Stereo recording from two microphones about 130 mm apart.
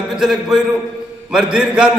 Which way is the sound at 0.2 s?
5° right (ahead or behind).